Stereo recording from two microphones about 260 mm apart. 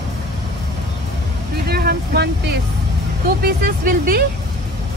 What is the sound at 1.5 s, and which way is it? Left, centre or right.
Vehicle, right.